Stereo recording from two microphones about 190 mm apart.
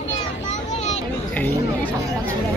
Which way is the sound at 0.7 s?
35° left (ahead or behind).